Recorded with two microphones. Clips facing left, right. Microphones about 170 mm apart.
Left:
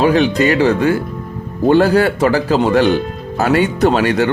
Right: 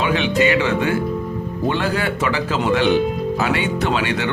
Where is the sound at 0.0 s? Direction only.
40° left (ahead or behind).